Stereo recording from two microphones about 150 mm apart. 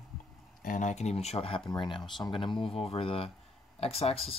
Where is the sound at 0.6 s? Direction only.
60° left (ahead or behind); by 1.6 s 40° left (ahead or behind).